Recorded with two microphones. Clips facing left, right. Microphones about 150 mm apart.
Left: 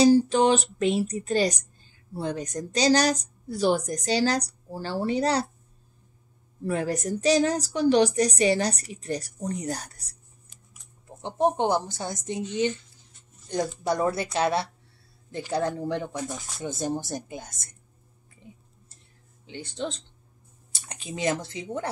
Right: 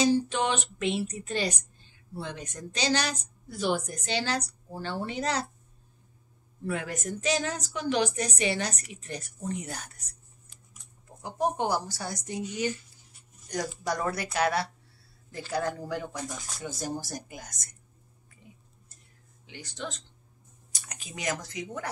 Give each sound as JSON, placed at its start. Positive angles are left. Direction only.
{"t": 0.0, "sound": "a woman's voice", "side_deg": 35}
{"t": 6.6, "sound": "a woman's voice", "side_deg": 35}
{"t": 11.1, "sound": "a woman's voice", "side_deg": 25}
{"t": 13.5, "sound": "a woman's voice", "side_deg": 25}
{"t": 18.4, "sound": "tick-tock", "side_deg": 30}
{"t": 19.4, "sound": "speech", "side_deg": 30}